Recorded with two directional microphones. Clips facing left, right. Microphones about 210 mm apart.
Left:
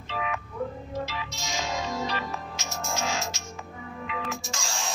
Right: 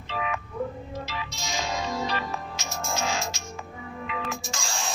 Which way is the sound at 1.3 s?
30° right (ahead or behind).